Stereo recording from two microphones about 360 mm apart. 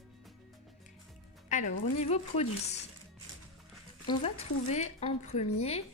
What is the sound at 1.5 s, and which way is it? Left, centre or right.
Music, centre.